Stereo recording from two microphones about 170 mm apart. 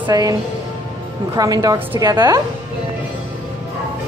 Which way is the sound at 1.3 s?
20° right (ahead or behind).